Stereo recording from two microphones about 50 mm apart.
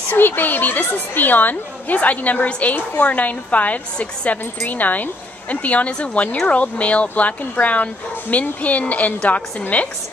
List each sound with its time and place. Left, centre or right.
0.1 s a woman's voice: left